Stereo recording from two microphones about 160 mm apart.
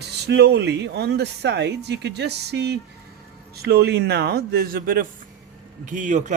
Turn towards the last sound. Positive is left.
turn(degrees=-50)  # may be behind; listen again after turning